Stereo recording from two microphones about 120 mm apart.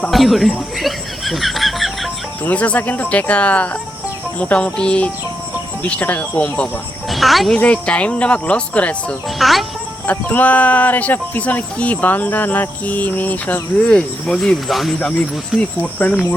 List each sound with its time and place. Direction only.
0.1 s chuckle: centre (ahead or behind)
2.4 s speech: 10° left (ahead or behind)
7.1 s speech: centre (ahead or behind)
9.4 s speech: centre (ahead or behind)
10.1 s speech: 15° left (ahead or behind)
15.8 s speech: 15° left (ahead or behind)